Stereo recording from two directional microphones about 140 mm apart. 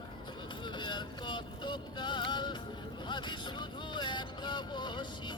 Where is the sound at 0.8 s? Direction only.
35° left (ahead or behind).